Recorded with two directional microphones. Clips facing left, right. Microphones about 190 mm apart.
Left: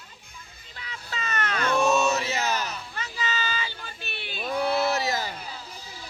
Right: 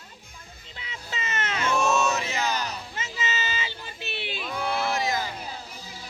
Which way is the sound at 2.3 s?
40° left (ahead or behind).